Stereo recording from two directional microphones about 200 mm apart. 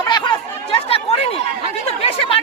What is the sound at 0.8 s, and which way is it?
Chatter, 30° left (ahead or behind).